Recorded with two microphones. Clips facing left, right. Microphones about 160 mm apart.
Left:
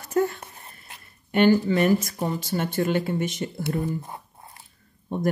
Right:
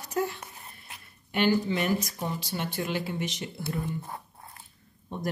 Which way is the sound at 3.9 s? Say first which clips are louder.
Left 4 dB; centre (ahead or behind).